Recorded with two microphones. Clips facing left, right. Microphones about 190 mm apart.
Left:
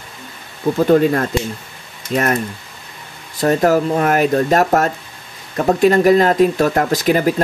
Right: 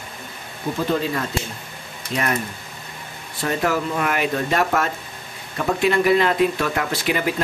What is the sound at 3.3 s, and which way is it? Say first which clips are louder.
Speech: left 8 dB; 40° left (ahead or behind).